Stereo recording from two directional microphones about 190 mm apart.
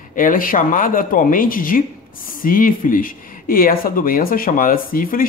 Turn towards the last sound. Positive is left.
turn(degrees=50)  # may be behind; listen again after turning